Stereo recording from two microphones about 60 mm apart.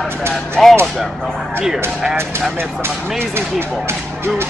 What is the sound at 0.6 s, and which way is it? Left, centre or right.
Speech, centre.